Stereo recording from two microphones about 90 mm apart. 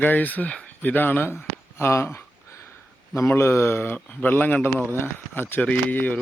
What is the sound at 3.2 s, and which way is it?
Speech, 30° left (ahead or behind).